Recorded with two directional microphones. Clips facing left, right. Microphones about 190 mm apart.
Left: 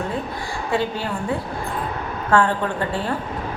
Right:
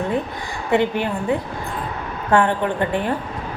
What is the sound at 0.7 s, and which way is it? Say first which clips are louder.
A woman's voice: right 5 dB; 20° right (ahead or behind).